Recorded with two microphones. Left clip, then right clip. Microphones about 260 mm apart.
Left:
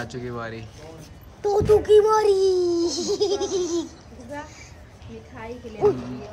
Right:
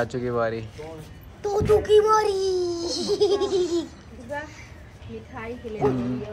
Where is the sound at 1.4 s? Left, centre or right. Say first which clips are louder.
Left 2 dB; left; by 3.9 s centre.